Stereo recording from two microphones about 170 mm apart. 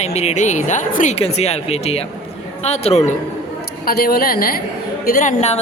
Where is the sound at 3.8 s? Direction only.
60° left (ahead or behind).